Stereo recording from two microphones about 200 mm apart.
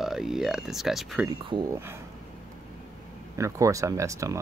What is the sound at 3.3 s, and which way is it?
Speech, 15° right (ahead or behind).